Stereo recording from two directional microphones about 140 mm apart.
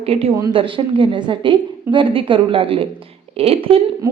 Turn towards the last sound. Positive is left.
turn(degrees=-40)  # may be behind; listen again after turning